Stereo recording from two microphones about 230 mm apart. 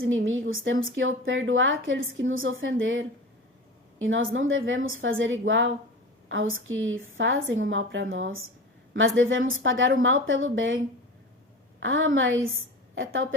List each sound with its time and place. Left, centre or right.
0.0 s a woman's voice: right
11.8 s a woman's voice: right